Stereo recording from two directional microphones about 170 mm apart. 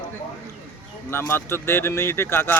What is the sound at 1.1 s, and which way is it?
Speech, 15° left (ahead or behind).